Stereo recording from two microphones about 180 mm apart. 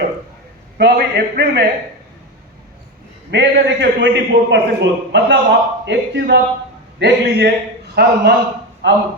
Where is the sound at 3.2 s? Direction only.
75° right (ahead or behind).